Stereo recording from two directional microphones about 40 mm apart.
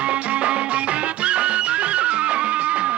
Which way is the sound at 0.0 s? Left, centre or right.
Right.